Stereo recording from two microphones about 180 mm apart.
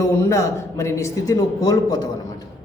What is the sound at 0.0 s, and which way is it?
A man's voice, 15° left (ahead or behind).